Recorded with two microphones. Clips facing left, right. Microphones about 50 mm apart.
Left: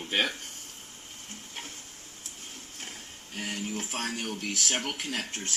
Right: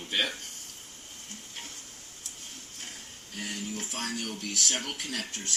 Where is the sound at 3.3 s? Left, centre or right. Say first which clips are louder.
Left 2 dB; left.